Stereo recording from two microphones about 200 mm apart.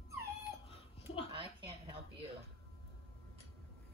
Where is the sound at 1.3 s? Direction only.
25° right (ahead or behind).